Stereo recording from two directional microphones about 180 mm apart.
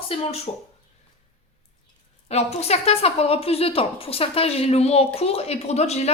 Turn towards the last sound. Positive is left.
turn(degrees=35)  # may be behind; listen again after turning